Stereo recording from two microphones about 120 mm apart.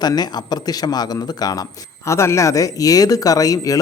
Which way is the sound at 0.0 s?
35° left (ahead or behind).